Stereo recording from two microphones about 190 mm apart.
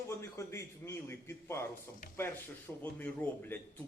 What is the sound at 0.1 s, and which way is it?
A man's voice, 15° left (ahead or behind).